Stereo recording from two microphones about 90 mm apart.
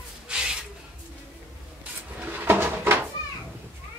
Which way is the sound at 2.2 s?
25° right (ahead or behind).